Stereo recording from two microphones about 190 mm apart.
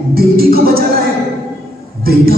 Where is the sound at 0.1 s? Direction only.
55° right (ahead or behind).